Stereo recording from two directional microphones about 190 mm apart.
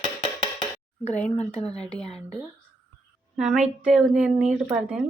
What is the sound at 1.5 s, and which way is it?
Speech, 35° left (ahead or behind).